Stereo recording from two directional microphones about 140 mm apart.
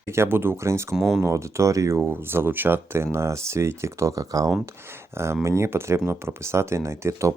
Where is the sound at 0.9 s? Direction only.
Centre (ahead or behind).